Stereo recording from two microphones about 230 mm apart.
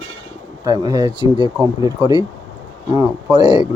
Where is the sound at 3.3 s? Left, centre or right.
Centre.